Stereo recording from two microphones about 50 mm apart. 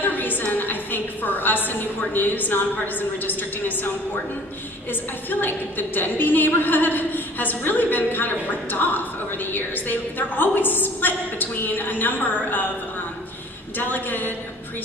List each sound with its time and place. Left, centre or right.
0.0 s a woman's voice: left
4.9 s a woman's voice: left
13.7 s a woman's voice: left